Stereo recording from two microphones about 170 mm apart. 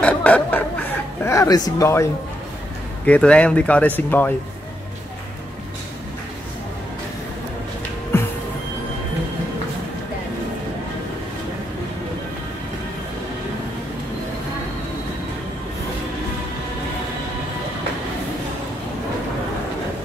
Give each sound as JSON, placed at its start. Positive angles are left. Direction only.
{"t": 0.0, "sound": "a sound", "side_deg": 10}
{"t": 1.8, "sound": "speech", "side_deg": 15}
{"t": 3.1, "sound": "speech", "side_deg": 5}
{"t": 8.1, "sound": "music", "side_deg": 15}